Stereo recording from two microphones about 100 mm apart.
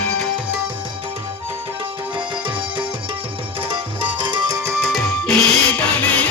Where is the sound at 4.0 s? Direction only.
50° right (ahead or behind).